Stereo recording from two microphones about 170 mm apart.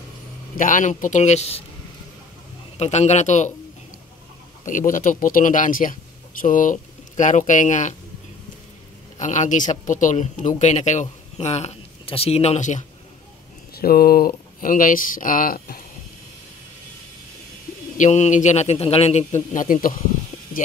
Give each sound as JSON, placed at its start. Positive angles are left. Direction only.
{"t": 0.6, "sound": "speech", "side_deg": 50}
{"t": 2.8, "sound": "speech", "side_deg": 40}
{"t": 4.6, "sound": "speech", "side_deg": 50}
{"t": 9.2, "sound": "speech", "side_deg": 45}
{"t": 13.7, "sound": "speech", "side_deg": 65}
{"t": 17.9, "sound": "speech", "side_deg": 45}